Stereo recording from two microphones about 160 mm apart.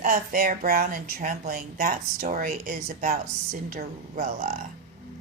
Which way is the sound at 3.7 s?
50° right (ahead or behind).